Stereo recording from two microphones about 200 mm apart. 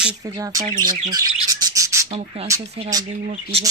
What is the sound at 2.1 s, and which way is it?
Speech, 30° right (ahead or behind).